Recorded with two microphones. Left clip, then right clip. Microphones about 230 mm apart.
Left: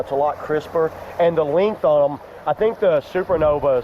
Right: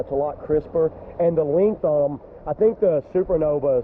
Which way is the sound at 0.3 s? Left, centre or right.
Centre.